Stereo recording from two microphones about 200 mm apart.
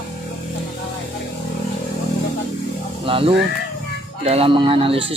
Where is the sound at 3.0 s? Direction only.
25° right (ahead or behind).